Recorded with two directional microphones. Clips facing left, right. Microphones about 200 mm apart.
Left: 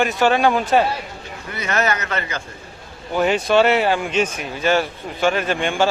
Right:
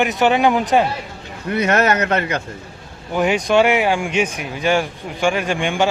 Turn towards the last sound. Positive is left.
turn(degrees=-15)  # may be behind; listen again after turning